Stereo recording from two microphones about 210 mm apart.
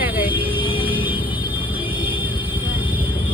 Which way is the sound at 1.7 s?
10° right (ahead or behind).